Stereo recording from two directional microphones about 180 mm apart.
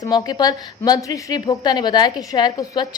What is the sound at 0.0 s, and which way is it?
A woman's voice, 20° left (ahead or behind).